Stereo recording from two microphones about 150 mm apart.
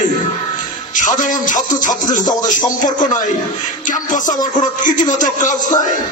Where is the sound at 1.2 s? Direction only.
55° left (ahead or behind).